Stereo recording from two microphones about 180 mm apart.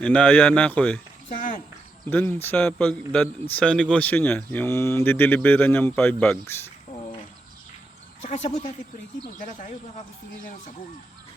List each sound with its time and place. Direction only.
0.0 s speech: 5° left (ahead or behind)
2.0 s speech: 10° left (ahead or behind)
8.2 s speech: 40° left (ahead or behind)
9.4 s speech: 50° left (ahead or behind)